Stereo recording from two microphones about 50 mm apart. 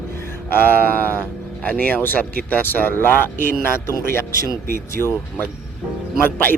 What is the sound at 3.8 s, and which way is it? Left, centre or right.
Speech, left.